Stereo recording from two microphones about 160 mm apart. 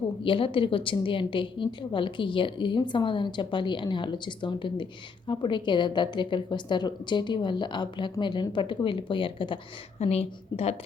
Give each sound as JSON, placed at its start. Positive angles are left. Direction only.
{"t": 0.3, "sound": "a woman's voice", "side_deg": 35}